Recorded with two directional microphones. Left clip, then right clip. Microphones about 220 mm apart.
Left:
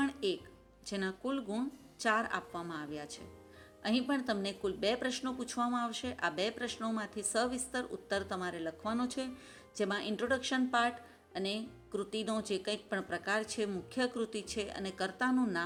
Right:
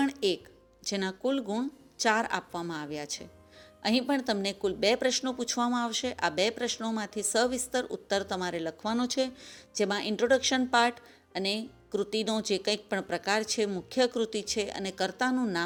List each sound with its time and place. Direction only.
0.0 s music: 30° right (ahead or behind)
0.9 s speech: 30° right (ahead or behind)